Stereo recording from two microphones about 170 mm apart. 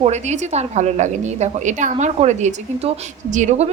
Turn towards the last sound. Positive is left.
turn(degrees=-45)  # may be behind; listen again after turning